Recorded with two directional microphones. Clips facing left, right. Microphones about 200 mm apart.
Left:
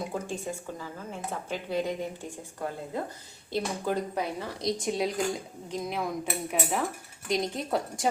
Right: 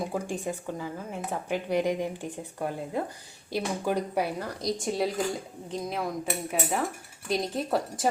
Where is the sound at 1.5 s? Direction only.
15° right (ahead or behind).